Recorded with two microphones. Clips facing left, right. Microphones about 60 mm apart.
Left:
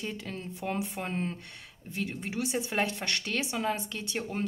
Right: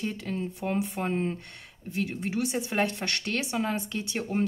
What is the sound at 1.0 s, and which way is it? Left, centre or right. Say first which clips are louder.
A woman's voice: right 5 dB; centre.